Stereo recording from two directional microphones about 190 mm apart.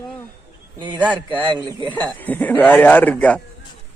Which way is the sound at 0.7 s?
25° right (ahead or behind).